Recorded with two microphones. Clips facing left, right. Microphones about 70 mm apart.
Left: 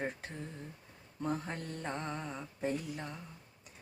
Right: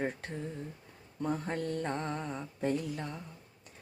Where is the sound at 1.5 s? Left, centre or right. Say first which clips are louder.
Right 8 dB; right.